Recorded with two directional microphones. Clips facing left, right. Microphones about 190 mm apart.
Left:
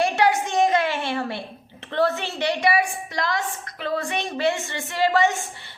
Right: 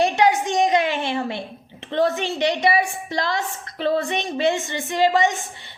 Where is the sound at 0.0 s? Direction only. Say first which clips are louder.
Right 2 dB; 20° right (ahead or behind).